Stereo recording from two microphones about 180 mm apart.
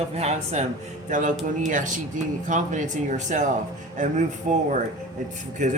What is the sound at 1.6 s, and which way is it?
Speech, 45° right (ahead or behind).